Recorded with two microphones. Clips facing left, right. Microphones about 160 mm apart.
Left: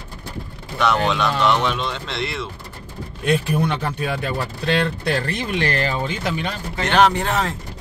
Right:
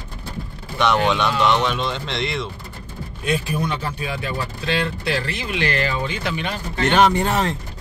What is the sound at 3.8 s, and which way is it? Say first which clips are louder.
Speech: left 3 dB; 55° left (ahead or behind).